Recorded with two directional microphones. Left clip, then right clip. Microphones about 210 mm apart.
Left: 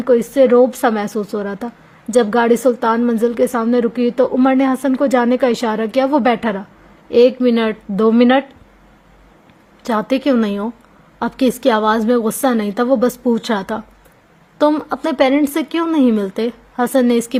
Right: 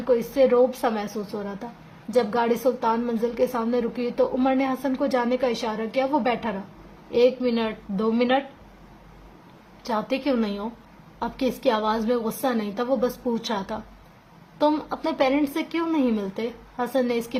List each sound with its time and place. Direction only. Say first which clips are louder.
0.0 s a woman's voice: left 8 dB; 40° left (ahead or behind)
9.8 s a woman's voice: left 9 dB; 40° left (ahead or behind)